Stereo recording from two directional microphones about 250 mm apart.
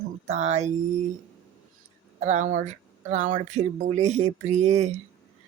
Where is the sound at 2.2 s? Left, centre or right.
Right.